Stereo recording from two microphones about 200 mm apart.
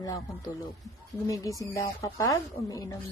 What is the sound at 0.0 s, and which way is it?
A woman's voice, 15° left (ahead or behind).